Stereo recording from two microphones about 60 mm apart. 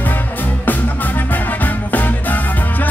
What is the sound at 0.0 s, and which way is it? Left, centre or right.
Music, left.